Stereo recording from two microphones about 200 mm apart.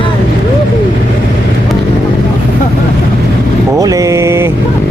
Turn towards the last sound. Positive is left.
turn(degrees=-15)  # may be behind; listen again after turning